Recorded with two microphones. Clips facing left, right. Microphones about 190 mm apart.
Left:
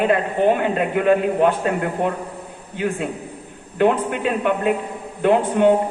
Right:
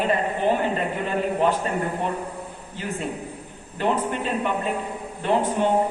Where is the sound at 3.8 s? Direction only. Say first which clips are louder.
Left 6 dB; 65° left (ahead or behind).